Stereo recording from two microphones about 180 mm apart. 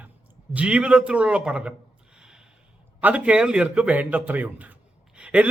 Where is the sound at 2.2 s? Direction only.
5° right (ahead or behind).